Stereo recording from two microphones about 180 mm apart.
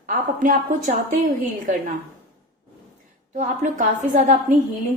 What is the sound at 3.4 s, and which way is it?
A woman's voice, 45° right (ahead or behind).